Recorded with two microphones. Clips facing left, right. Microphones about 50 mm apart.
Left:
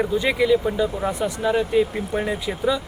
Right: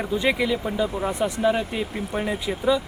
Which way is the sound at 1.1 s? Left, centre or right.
Centre.